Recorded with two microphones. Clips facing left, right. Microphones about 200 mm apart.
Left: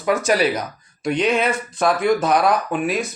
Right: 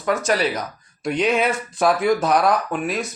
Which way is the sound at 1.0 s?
Centre (ahead or behind).